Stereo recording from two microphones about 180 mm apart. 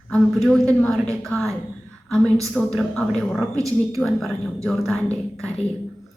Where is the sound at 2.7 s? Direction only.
5° left (ahead or behind).